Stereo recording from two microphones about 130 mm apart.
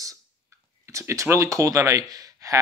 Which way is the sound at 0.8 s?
20° right (ahead or behind).